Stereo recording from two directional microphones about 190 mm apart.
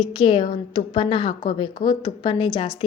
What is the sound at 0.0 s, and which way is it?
A woman's voice, 25° left (ahead or behind).